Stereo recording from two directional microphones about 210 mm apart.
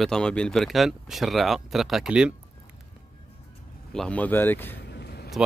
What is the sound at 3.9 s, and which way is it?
Speech, 5° left (ahead or behind).